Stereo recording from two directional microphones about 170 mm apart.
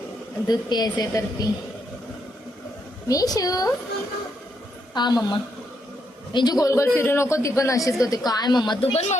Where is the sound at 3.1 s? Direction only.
20° left (ahead or behind).